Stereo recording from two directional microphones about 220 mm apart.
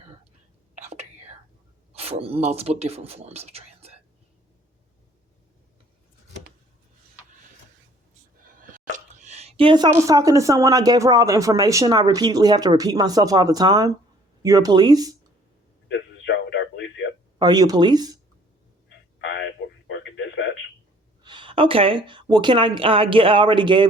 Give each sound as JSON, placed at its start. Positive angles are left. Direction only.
{"t": 0.8, "sound": "whispering", "side_deg": -30}
{"t": 1.9, "sound": "speech", "side_deg": -25}
{"t": 8.5, "sound": "a sound", "side_deg": -35}
{"t": 10.1, "sound": "speech", "side_deg": -15}
{"t": 15.9, "sound": "a sound", "side_deg": 55}
{"t": 17.3, "sound": "speech", "side_deg": -20}
{"t": 19.2, "sound": "a sound", "side_deg": 55}
{"t": 19.9, "sound": "radio", "side_deg": 55}
{"t": 21.2, "sound": "a woman's voice", "side_deg": -20}